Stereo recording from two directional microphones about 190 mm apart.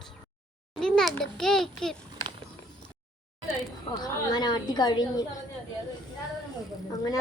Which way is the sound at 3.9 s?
20° left (ahead or behind).